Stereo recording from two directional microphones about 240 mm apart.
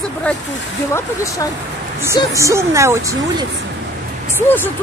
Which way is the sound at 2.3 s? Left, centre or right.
Centre.